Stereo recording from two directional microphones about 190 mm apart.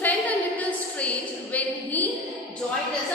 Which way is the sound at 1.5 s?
10° left (ahead or behind).